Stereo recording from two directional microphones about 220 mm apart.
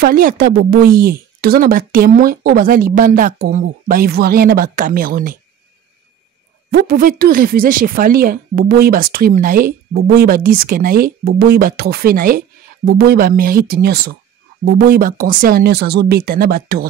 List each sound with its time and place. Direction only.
0.0 s speech: 40° right (ahead or behind)
6.7 s speech: 40° right (ahead or behind)